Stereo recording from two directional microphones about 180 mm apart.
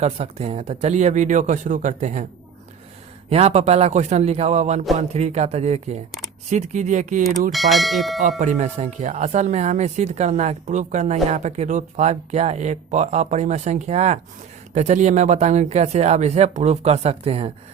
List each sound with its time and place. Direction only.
0.0 s speech: 35° right (ahead or behind)
3.2 s speech: 35° right (ahead or behind)
7.5 s speech: centre (ahead or behind)
8.4 s speech: 40° right (ahead or behind)